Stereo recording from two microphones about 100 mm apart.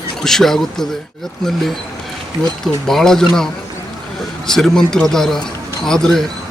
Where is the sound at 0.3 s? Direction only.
5° left (ahead or behind).